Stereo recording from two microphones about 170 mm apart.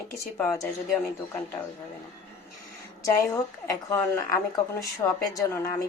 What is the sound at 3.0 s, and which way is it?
A woman's voice, 20° left (ahead or behind).